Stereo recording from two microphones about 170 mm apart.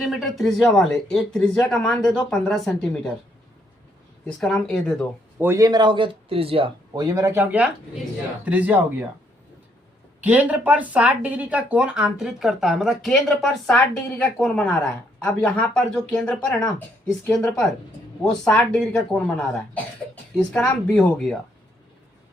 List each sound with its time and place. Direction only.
0.0 s speech: centre (ahead or behind)
4.4 s speech: centre (ahead or behind)
5.4 s speech: 15° right (ahead or behind); by 6.7 s 35° right (ahead or behind)
6.9 s speech: 20° right (ahead or behind)
8.4 s speech: 10° right (ahead or behind)
10.2 s speech: 10° right (ahead or behind)